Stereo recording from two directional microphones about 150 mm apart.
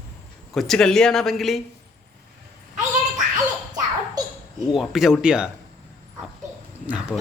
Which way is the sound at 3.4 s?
25° right (ahead or behind).